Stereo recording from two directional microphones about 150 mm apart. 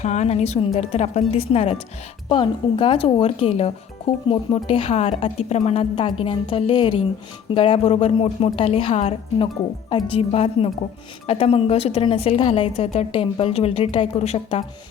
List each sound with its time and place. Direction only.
0.0 s a woman's voice: 50° left (ahead or behind)